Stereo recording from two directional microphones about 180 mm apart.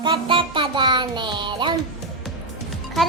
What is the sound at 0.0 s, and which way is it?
Music, 30° right (ahead or behind).